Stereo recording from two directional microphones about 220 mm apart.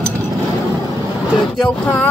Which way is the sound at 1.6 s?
5° left (ahead or behind).